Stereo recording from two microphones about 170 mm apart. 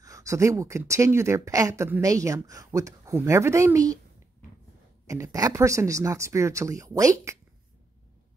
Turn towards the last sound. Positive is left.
turn(degrees=-20)  # may be behind; listen again after turning